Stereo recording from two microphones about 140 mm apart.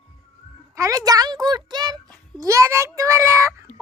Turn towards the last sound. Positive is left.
turn(degrees=-20)  # may be behind; listen again after turning